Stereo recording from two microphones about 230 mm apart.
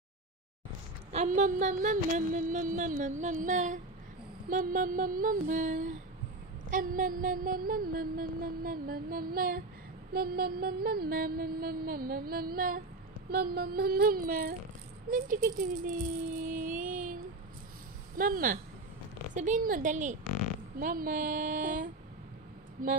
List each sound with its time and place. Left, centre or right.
1.1 s mantra: right